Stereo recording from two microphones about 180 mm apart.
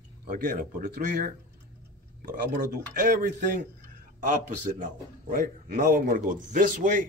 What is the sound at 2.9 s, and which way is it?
A man's voice, 45° right (ahead or behind).